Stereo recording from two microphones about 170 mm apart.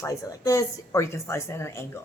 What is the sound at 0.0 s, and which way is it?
Speech, 20° left (ahead or behind).